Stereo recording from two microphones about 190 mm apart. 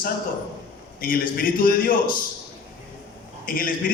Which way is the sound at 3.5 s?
45° left (ahead or behind).